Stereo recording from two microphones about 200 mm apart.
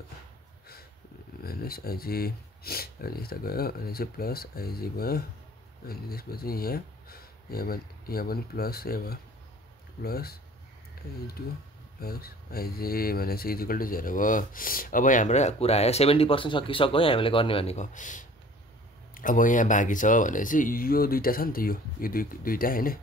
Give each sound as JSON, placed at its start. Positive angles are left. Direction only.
{"t": 1.4, "sound": "speech", "side_deg": 50}
{"t": 12.0, "sound": "speech", "side_deg": 50}